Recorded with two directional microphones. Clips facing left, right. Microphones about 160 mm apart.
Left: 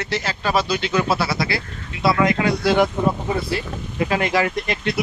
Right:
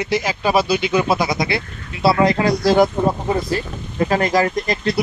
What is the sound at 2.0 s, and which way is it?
Speech, 35° right (ahead or behind).